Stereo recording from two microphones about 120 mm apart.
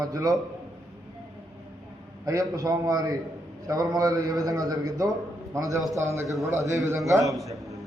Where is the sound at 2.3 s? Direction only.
30° right (ahead or behind).